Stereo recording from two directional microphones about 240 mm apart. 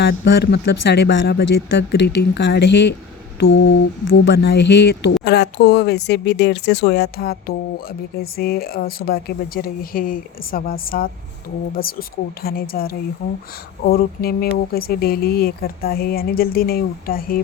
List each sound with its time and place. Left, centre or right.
0.0 s speech: left